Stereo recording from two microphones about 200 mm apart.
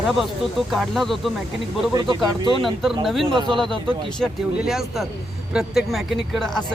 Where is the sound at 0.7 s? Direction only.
Centre (ahead or behind).